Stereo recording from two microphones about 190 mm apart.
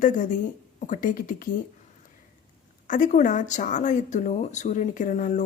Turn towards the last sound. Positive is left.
turn(degrees=45)  # may be behind; listen again after turning